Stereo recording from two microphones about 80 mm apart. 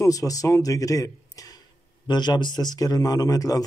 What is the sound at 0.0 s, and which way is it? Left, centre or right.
A man's voice, left.